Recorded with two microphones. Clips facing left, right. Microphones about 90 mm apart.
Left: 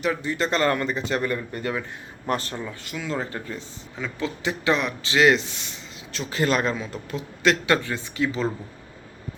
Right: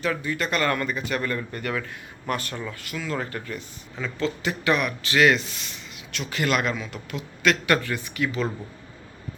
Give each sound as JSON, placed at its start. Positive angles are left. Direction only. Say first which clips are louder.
{"t": 0.0, "sound": "a man's voice", "louder": "left 2 dB", "side_deg": 20}
{"t": 2.2, "sound": "speech", "louder": "left 2 dB", "side_deg": 30}
{"t": 2.6, "sound": "a man's voice", "louder": "even", "side_deg": 15}